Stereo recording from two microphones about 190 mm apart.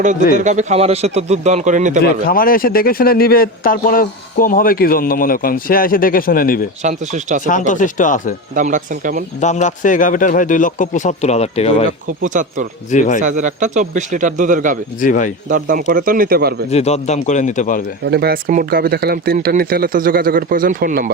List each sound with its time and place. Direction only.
0.3 s a man's voice: 40° right (ahead or behind)
2.2 s speech: 50° left (ahead or behind)
6.8 s a man's voice: 40° right (ahead or behind)
7.7 s speech: 40° left (ahead or behind)
8.5 s speech: 40° right (ahead or behind)
9.4 s a man's voice: 40° left (ahead or behind)
12.0 s speech: 45° right (ahead or behind)
12.9 s a man's voice: 40° left (ahead or behind)
13.2 s a man's voice: 40° right (ahead or behind)
15.0 s a man's voice: 40° left (ahead or behind)
15.4 s speech: 45° right (ahead or behind)
16.6 s a man's voice: 35° left (ahead or behind)
18.0 s speech: 60° right (ahead or behind)